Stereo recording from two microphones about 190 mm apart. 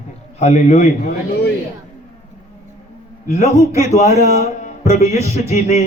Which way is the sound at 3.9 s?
35° left (ahead or behind).